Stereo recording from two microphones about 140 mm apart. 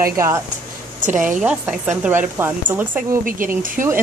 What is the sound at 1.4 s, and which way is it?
Speech, 10° right (ahead or behind).